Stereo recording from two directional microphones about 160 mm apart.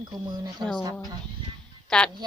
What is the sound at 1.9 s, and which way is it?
Speech, 5° left (ahead or behind).